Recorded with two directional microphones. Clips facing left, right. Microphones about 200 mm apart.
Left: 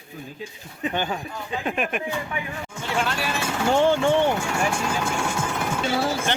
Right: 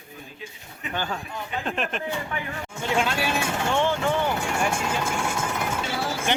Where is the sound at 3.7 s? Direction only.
35° left (ahead or behind).